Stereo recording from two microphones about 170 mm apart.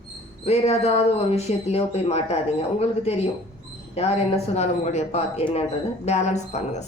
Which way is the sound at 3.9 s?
40° left (ahead or behind).